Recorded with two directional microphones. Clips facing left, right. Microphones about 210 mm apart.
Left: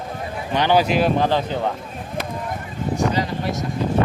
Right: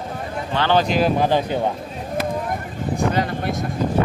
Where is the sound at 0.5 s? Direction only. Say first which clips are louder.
Left 1 dB; 15° left (ahead or behind).